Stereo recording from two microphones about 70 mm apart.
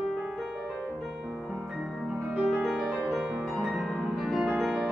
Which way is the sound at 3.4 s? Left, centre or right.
Centre.